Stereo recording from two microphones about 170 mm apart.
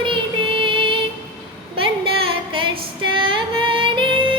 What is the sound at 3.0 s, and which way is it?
Female singing, 30° right (ahead or behind).